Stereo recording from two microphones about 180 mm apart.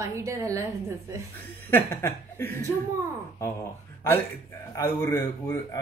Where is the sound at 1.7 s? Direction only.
10° left (ahead or behind).